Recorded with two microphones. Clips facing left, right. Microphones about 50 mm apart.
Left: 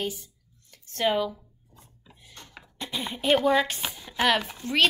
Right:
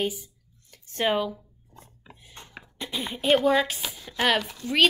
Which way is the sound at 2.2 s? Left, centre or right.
Right.